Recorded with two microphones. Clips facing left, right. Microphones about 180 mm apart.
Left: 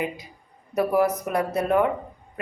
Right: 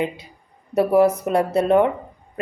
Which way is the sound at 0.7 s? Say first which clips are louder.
Right 5 dB; 30° right (ahead or behind).